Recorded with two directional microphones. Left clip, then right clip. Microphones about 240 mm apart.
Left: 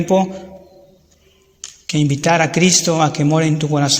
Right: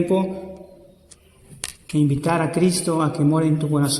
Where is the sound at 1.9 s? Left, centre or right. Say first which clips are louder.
Left 5 dB; left.